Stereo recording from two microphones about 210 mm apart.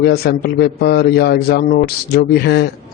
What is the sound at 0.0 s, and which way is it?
A man's voice, 50° left (ahead or behind).